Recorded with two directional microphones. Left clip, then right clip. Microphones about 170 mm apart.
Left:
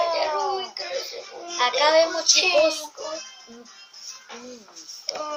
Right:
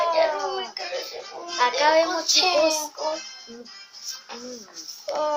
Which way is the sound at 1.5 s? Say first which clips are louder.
Left 1 dB; 5° left (ahead or behind).